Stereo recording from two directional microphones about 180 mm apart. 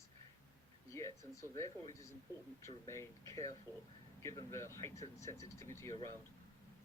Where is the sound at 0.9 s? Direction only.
15° left (ahead or behind).